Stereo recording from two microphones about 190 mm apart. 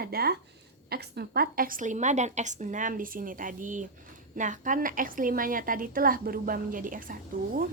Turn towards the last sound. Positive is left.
turn(degrees=-45)  # may be behind; listen again after turning